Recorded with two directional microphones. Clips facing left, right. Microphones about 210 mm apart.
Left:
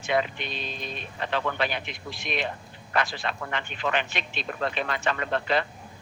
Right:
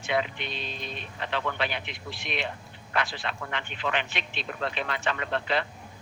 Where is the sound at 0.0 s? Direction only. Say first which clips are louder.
Left 2 dB; 45° left (ahead or behind).